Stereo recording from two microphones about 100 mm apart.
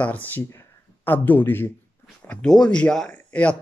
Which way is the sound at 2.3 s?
10° left (ahead or behind).